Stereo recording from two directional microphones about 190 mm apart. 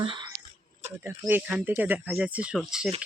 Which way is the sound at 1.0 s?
10° right (ahead or behind).